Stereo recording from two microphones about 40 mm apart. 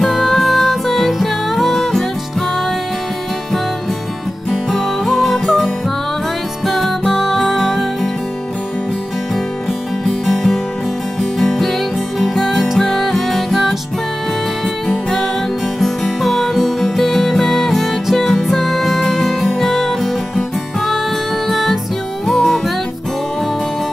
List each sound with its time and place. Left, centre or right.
0.0 s music: centre
4.5 s music: centre
10.2 s music: centre
14.9 s music: centre